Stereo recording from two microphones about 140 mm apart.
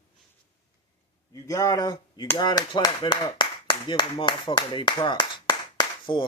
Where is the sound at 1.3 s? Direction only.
25° left (ahead or behind).